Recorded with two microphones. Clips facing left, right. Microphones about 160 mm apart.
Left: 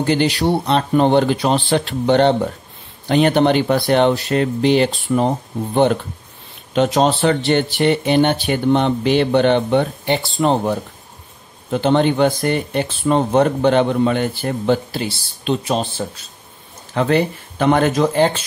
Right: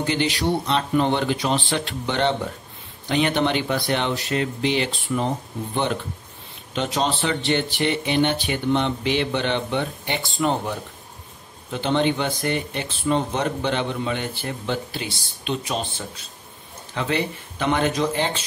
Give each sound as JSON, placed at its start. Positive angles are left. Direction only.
{"t": 0.0, "sound": "speech", "side_deg": 40}
{"t": 6.7, "sound": "speech", "side_deg": 45}
{"t": 7.1, "sound": "speech", "side_deg": 60}
{"t": 7.4, "sound": "speech", "side_deg": 40}
{"t": 16.9, "sound": "speech", "side_deg": 50}